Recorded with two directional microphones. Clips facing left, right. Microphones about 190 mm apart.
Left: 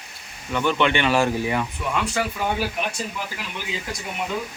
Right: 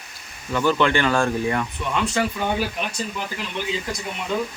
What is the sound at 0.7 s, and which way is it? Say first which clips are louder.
Speech: right 1 dB; 20° left (ahead or behind).